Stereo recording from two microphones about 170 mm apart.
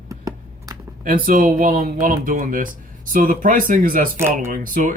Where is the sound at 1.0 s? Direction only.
55° right (ahead or behind).